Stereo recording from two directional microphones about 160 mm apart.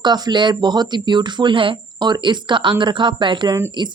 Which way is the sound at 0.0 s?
25° right (ahead or behind).